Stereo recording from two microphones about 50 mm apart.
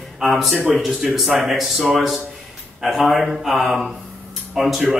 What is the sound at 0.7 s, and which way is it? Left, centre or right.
Speech, centre.